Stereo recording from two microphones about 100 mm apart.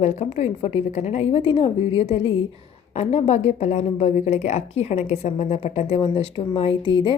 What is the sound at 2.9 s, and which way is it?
Speech, 90° left.